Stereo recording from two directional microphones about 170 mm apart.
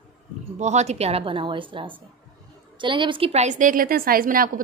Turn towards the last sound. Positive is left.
turn(degrees=-55)  # may be behind; listen again after turning